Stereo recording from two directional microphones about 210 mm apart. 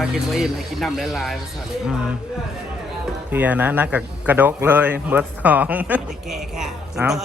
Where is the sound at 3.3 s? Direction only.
10° right (ahead or behind).